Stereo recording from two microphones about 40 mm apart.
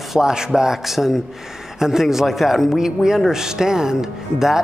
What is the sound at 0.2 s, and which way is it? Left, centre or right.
Speech, centre.